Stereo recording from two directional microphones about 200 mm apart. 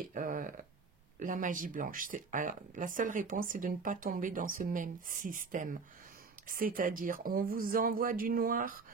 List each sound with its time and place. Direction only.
0.1 s speech: 40° right (ahead or behind)